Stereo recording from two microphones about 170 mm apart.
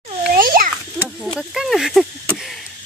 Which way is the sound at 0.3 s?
55° right (ahead or behind).